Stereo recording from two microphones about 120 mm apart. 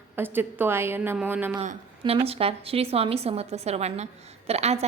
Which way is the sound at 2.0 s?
55° right (ahead or behind).